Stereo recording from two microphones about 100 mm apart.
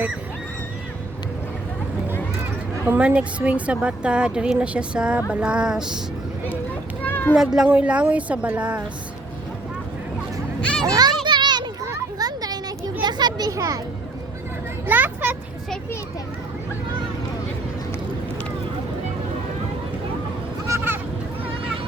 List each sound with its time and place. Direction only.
2.8 s speech: 15° right (ahead or behind)
7.0 s children playing: 20° left (ahead or behind)
7.3 s speech: 5° right (ahead or behind)
10.6 s a child's voice: 10° left (ahead or behind)
10.8 s a child's voice: 40° right (ahead or behind)
11.3 s children playing: 45° right (ahead or behind)
14.8 s vehicle: 15° right (ahead or behind)
20.7 s a sound: 25° right (ahead or behind)